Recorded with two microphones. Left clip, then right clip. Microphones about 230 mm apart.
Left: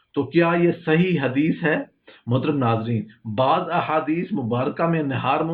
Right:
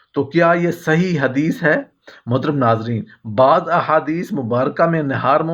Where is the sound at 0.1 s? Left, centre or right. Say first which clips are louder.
Right 5 dB; right.